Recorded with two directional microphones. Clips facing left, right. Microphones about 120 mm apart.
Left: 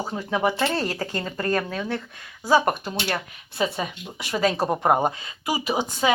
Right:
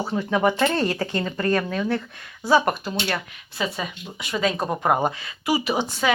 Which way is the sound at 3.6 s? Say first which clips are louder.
Left 2 dB; 40° left (ahead or behind).